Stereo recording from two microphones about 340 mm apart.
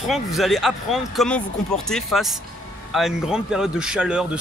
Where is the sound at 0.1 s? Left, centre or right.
Centre.